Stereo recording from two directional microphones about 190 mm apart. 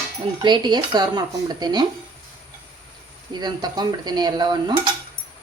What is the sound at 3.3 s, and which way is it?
Speech, 20° right (ahead or behind).